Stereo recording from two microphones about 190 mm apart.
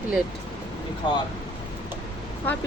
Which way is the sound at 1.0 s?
25° left (ahead or behind).